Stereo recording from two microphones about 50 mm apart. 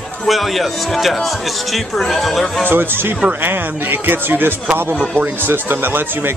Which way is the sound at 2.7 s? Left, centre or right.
Right.